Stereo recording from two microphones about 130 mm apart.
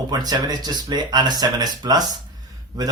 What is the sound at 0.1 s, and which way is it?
Speech, 30° right (ahead or behind).